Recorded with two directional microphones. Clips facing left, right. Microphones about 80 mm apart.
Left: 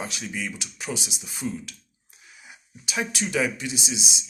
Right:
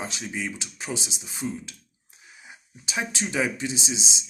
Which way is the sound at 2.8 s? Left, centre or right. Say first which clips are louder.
Left 1 dB; right.